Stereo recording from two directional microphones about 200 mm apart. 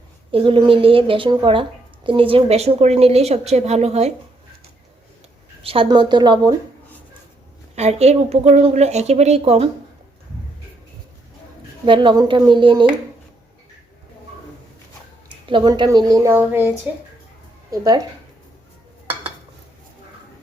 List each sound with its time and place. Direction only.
0.3 s a woman's voice: 25° right (ahead or behind)
5.6 s a woman's voice: 25° right (ahead or behind)
7.8 s a woman's voice: 35° right (ahead or behind)
11.9 s a woman's voice: 25° right (ahead or behind)
15.4 s a woman's voice: 25° right (ahead or behind)